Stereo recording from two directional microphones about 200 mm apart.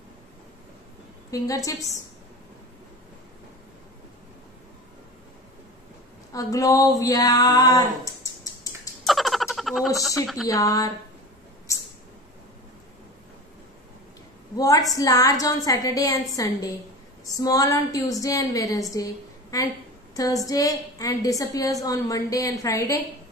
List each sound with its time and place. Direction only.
1.3 s a woman's voice: 15° left (ahead or behind)
6.3 s a woman's voice: 15° left (ahead or behind)
9.0 s frog: centre (ahead or behind)
10.2 s speech: centre (ahead or behind)
10.5 s a woman's voice: 15° left (ahead or behind)
14.9 s a woman's voice: 15° left (ahead or behind)